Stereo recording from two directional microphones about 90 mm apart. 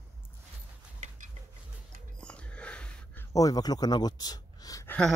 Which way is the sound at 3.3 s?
45° left (ahead or behind).